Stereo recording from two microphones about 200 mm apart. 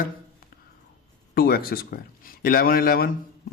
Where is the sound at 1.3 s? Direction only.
50° left (ahead or behind).